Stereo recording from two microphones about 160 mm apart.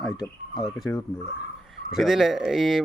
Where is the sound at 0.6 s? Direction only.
Centre (ahead or behind).